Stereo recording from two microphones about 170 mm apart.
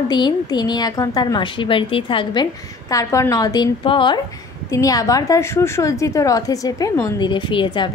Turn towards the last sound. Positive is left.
turn(degrees=30)  # may be behind; listen again after turning